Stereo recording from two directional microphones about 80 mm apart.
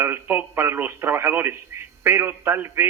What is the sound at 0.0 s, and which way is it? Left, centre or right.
A man's voice, right.